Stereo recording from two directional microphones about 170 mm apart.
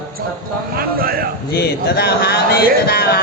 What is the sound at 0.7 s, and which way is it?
Speech, 60° right (ahead or behind).